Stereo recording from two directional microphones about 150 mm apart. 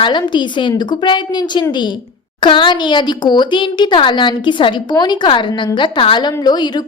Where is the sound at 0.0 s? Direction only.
30° left (ahead or behind).